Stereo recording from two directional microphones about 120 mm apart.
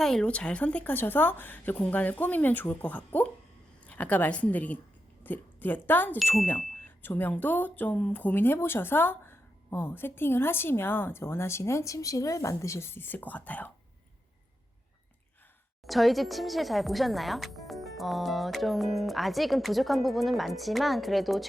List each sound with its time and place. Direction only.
0.0 s speech: 5° left (ahead or behind)
15.9 s speech: centre (ahead or behind)